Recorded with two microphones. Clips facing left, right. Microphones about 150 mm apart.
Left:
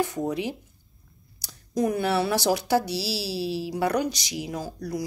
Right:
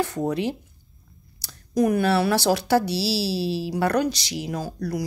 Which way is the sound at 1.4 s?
20° left (ahead or behind).